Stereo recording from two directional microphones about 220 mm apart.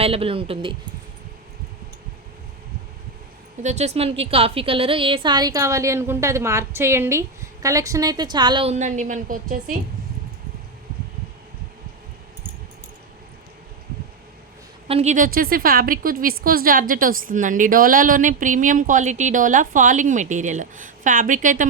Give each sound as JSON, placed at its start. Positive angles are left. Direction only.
{"t": 0.0, "sound": "a woman's voice", "side_deg": -25}
{"t": 3.6, "sound": "a woman's voice", "side_deg": -30}
{"t": 14.8, "sound": "a woman's voice", "side_deg": -30}